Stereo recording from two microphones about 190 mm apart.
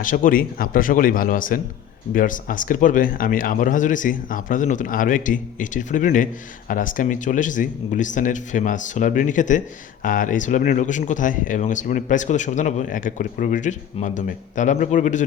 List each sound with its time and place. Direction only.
0.0 s speech: 45° left (ahead or behind)